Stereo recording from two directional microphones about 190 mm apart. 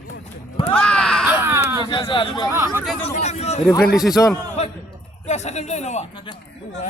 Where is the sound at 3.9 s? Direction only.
Centre (ahead or behind).